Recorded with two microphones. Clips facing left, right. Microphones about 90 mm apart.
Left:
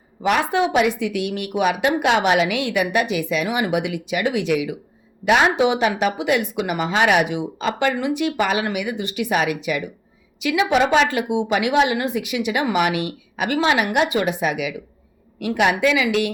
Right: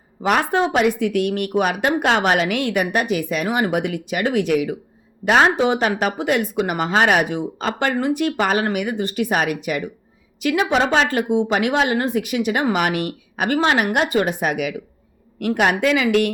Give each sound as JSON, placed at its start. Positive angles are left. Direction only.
{"t": 0.2, "sound": "a woman's voice", "side_deg": -40}